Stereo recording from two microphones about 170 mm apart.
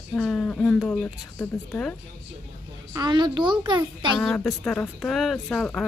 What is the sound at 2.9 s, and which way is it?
A child's voice, 25° right (ahead or behind).